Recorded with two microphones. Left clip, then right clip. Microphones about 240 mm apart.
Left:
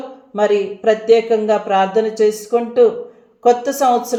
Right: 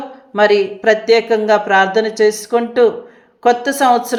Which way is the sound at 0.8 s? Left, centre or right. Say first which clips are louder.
Even; right.